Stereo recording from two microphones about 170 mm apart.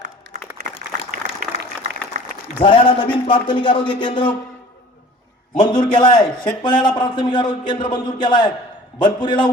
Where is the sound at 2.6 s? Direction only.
30° left (ahead or behind).